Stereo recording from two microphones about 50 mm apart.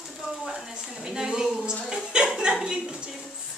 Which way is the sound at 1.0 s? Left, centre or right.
Centre.